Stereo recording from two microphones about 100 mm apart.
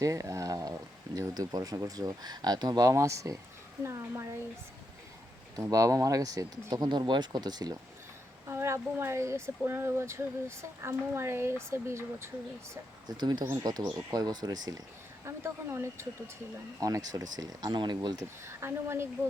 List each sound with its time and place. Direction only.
0.0 s speech: 35° right (ahead or behind)
5.7 s speech: 35° right (ahead or behind)
8.4 s speech: 25° right (ahead or behind)
13.1 s speech: 45° right (ahead or behind)
13.4 s speech: 25° right (ahead or behind)
13.7 s speech: 40° right (ahead or behind)
15.2 s speech: 30° right (ahead or behind); by 18.2 s 45° right (ahead or behind)
18.4 s speech: 25° right (ahead or behind)